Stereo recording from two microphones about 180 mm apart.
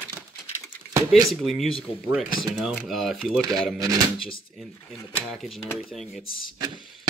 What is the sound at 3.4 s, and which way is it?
Speech, 20° right (ahead or behind).